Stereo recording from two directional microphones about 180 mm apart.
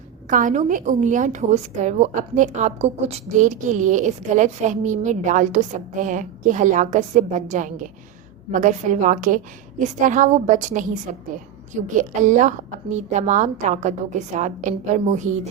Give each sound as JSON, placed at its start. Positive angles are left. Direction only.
{"t": 0.3, "sound": "a woman's voice", "side_deg": -45}